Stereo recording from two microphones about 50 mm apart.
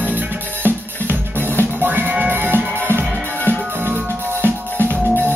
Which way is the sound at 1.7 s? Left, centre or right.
Right.